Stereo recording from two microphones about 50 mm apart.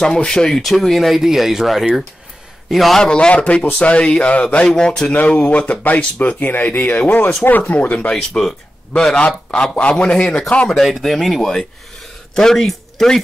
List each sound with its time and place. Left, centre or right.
0.0 s speech: centre
3.0 s a man's voice: centre
4.6 s speech: centre
5.1 s speech: left
8.1 s a man's voice: centre
10.8 s speech: centre